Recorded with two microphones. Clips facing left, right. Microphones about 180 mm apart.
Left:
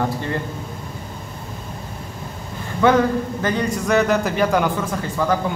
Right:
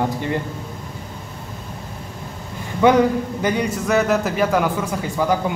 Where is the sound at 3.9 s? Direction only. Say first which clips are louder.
Left 1 dB; centre (ahead or behind).